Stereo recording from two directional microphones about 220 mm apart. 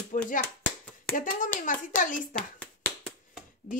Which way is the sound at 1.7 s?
35° left (ahead or behind).